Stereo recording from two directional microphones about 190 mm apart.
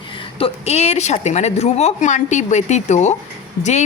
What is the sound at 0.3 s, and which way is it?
Speech, 30° left (ahead or behind).